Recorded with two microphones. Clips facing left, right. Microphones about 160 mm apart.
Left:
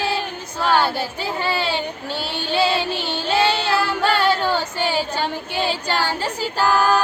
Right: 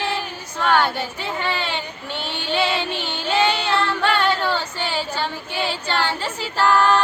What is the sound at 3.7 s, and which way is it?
Music, 10° left (ahead or behind).